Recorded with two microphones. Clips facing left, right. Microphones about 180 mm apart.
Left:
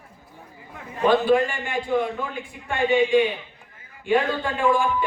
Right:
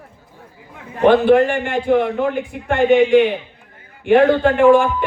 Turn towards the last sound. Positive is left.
turn(degrees=-70)  # may be behind; listen again after turning